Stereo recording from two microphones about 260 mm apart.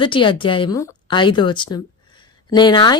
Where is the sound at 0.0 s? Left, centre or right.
Centre.